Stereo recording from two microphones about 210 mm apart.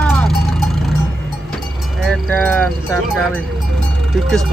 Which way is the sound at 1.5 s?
Centre (ahead or behind).